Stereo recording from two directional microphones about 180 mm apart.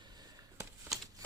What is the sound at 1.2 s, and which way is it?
Typewriter, 20° right (ahead or behind).